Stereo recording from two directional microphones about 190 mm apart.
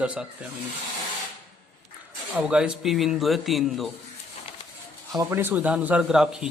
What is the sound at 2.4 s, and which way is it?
Speech, 5° right (ahead or behind).